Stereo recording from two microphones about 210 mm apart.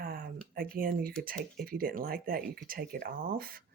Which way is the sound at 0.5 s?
45° right (ahead or behind).